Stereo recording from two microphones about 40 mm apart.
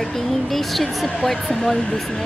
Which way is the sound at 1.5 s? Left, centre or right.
Centre.